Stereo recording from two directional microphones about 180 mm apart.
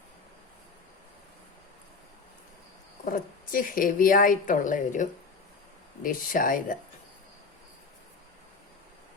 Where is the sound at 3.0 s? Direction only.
50° left (ahead or behind).